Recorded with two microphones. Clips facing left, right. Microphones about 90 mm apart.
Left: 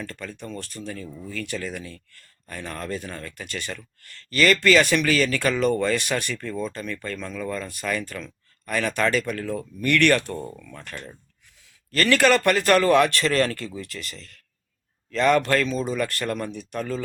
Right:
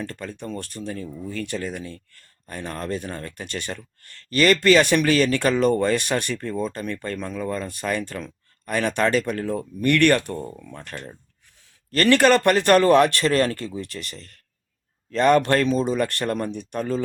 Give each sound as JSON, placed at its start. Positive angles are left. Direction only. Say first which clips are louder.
{"t": 0.0, "sound": "speech", "louder": "right 3 dB", "side_deg": -25}
{"t": 1.0, "sound": "speech", "louder": "right 4 dB", "side_deg": -10}
{"t": 1.3, "sound": "speech", "louder": "right 2 dB", "side_deg": -30}
{"t": 10.3, "sound": "speech", "louder": "right 1 dB", "side_deg": -5}
{"t": 10.6, "sound": "speech", "louder": "right 2 dB", "side_deg": -20}
{"t": 11.9, "sound": "speech", "louder": "right 3 dB", "side_deg": -30}